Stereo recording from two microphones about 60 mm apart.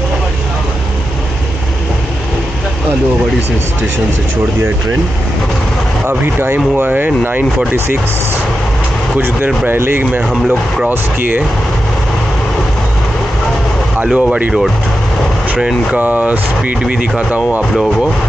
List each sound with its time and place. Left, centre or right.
6.0 s speech: right
9.7 s speech: right
14.0 s speech: centre
16.0 s speech: right